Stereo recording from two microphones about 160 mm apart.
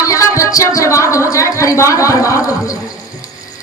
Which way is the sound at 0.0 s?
20° left (ahead or behind).